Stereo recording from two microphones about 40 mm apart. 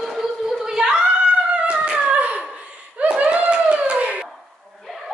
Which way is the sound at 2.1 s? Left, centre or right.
Right.